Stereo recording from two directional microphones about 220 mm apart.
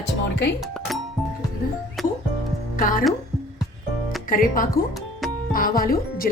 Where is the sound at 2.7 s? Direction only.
40° left (ahead or behind).